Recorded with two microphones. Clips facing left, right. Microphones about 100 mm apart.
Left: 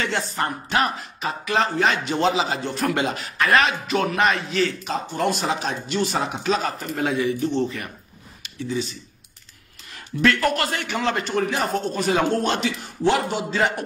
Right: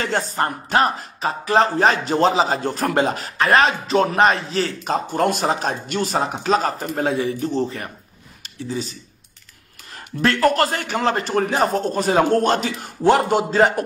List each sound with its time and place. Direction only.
0.0 s speech: 40° right (ahead or behind)
8.4 s a sound: 40° right (ahead or behind)
9.9 s speech: 35° right (ahead or behind)